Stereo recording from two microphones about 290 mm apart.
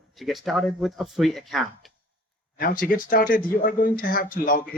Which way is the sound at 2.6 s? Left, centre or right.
Left.